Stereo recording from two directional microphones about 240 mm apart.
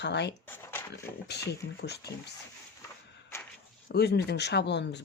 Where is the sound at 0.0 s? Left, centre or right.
Left.